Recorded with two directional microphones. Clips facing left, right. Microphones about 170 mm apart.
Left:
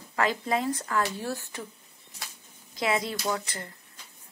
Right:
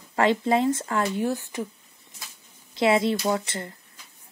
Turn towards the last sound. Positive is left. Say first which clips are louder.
# right 7 dB
turn(degrees=-25)  # may be behind; listen again after turning